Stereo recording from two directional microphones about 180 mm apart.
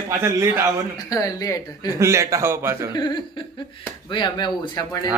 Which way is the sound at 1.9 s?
15° right (ahead or behind).